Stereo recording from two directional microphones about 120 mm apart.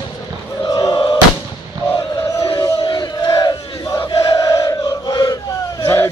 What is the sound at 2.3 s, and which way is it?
Battle cry, 30° left (ahead or behind).